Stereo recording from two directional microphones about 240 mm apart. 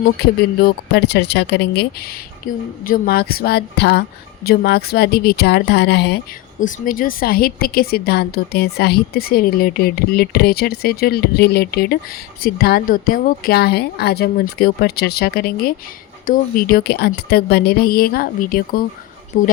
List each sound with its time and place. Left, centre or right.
0.2 s a woman's voice: left